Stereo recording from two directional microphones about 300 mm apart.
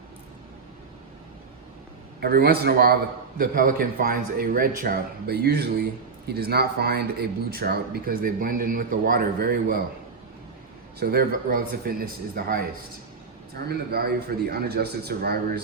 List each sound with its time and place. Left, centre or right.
2.2 s a man's voice: right
11.0 s a man's voice: right